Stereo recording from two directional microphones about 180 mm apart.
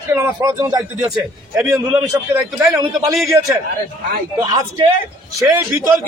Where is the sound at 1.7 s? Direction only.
10° right (ahead or behind).